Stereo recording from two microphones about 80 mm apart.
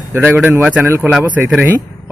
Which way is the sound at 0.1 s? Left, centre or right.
Right.